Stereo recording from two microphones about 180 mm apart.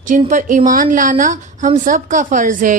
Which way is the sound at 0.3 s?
45° right (ahead or behind).